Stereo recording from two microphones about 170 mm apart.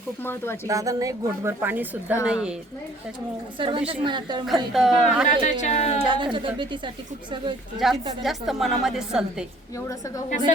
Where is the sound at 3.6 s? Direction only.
30° right (ahead or behind).